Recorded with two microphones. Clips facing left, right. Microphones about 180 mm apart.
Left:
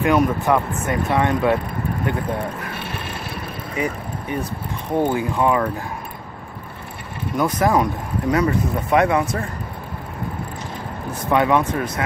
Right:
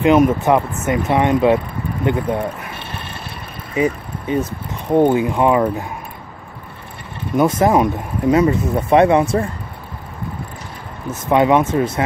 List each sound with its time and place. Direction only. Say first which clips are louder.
0.0 s speech: right 5 dB; 20° right (ahead or behind)
3.7 s speech: right 7 dB; 20° right (ahead or behind)
7.3 s speech: right 4 dB; 25° right (ahead or behind)
11.2 s speech: right 4 dB; 20° right (ahead or behind)